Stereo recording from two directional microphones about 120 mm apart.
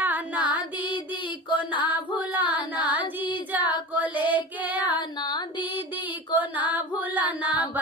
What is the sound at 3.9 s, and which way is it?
Female singing, 15° right (ahead or behind).